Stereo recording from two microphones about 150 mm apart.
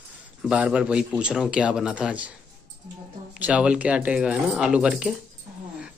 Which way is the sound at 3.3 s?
5° right (ahead or behind).